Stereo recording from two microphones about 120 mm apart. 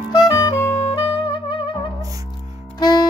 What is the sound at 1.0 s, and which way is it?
Saxophone, 40° left (ahead or behind).